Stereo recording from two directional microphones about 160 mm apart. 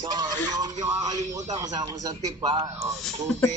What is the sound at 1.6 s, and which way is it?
Speech, 25° right (ahead or behind).